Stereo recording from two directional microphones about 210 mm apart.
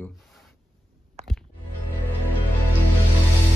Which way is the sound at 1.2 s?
30° right (ahead or behind).